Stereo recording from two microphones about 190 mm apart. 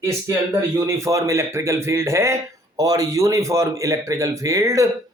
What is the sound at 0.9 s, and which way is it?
Speech, 15° right (ahead or behind).